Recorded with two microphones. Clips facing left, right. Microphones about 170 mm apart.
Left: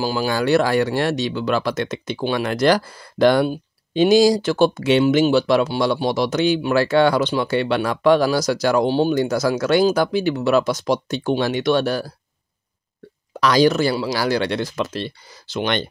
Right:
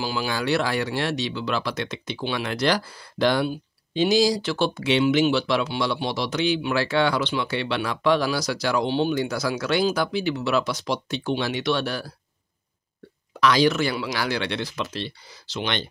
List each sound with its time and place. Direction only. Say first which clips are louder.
0.0 s speech: left 6 dB; 45° left (ahead or behind)
13.3 s speech: left 4 dB; 40° left (ahead or behind)